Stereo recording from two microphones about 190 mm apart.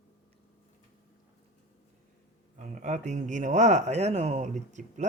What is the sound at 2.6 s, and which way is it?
Speech, 40° right (ahead or behind).